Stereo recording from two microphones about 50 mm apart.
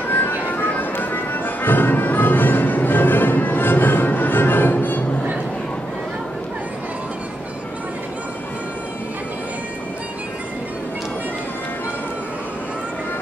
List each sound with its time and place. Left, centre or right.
0.1 s music: left